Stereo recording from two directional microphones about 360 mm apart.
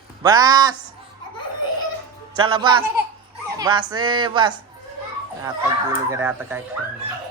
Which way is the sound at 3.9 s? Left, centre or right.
Centre.